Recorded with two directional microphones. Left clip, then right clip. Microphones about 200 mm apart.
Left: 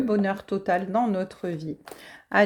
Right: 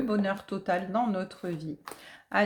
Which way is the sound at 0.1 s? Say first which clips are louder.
Left 5 dB; 35° left (ahead or behind).